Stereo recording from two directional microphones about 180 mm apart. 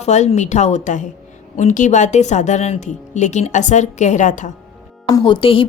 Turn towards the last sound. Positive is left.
turn(degrees=30)  # may be behind; listen again after turning